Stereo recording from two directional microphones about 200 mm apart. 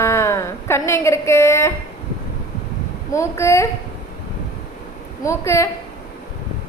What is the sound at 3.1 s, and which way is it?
Speech, 15° left (ahead or behind).